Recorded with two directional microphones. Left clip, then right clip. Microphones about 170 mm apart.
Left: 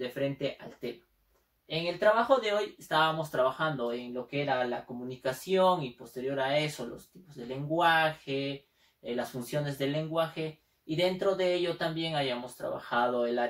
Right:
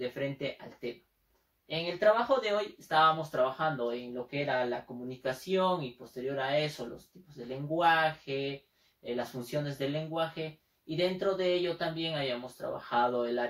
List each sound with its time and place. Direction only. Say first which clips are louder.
0.0 s speech: left 2 dB; 10° left (ahead or behind)